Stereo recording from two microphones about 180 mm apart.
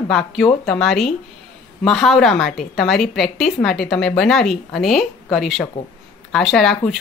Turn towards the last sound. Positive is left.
turn(degrees=0)  # may be behind; listen again after turning